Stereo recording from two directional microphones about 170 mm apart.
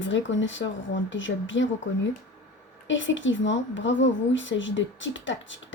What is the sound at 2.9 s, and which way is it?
Speech, 90° left.